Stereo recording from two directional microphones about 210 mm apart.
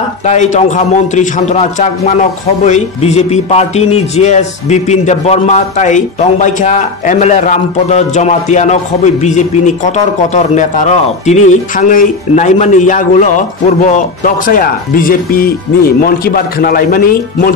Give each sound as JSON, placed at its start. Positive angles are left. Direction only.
{"t": 0.2, "sound": "a man's voice", "side_deg": 35}